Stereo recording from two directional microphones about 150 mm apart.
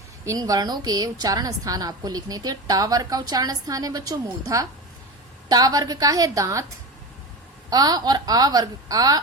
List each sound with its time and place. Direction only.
0.3 s a woman's voice: 25° right (ahead or behind)
7.7 s a woman's voice: 25° right (ahead or behind)